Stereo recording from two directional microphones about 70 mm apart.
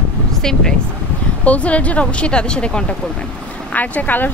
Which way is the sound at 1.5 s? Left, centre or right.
Centre.